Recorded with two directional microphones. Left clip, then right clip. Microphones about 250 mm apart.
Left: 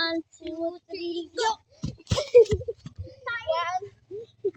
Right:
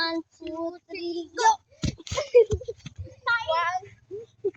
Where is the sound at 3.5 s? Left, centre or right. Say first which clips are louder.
Right 1 dB; centre.